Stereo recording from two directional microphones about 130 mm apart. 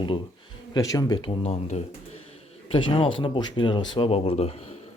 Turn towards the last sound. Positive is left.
turn(degrees=50)  # may be behind; listen again after turning